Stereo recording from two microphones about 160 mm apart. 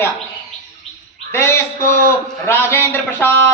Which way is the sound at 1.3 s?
15° left (ahead or behind).